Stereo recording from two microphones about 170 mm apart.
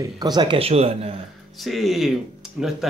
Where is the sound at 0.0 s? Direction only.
25° right (ahead or behind).